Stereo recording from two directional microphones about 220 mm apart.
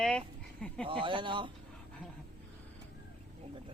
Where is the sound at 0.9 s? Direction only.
25° right (ahead or behind).